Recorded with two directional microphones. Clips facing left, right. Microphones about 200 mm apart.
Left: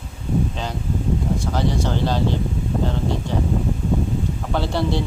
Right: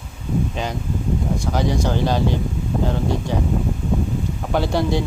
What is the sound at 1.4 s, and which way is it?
Speech, 15° right (ahead or behind).